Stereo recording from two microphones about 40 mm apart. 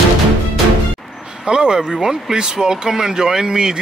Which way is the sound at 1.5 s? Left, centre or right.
Right.